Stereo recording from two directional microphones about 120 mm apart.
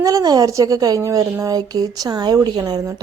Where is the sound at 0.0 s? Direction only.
30° right (ahead or behind).